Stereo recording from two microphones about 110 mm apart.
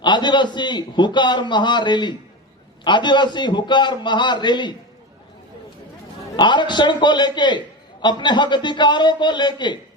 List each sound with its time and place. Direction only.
0.0 s a man's voice: 45° left (ahead or behind)
6.3 s a man's voice: 45° left (ahead or behind)